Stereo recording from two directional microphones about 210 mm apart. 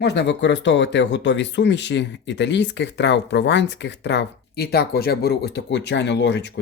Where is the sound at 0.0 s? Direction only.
55° left (ahead or behind).